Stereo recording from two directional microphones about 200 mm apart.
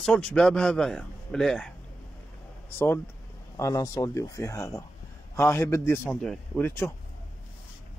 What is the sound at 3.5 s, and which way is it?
Speech, 15° left (ahead or behind).